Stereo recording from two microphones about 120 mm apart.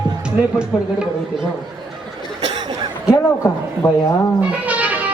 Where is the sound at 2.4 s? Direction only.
40° right (ahead or behind).